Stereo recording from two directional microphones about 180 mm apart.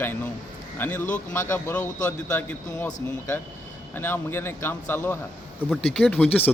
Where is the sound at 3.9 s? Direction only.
10° left (ahead or behind).